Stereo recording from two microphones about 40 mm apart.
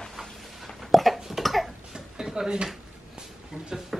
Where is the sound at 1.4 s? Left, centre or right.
Centre.